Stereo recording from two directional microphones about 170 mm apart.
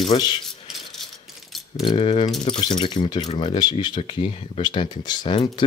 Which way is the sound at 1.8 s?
30° left (ahead or behind).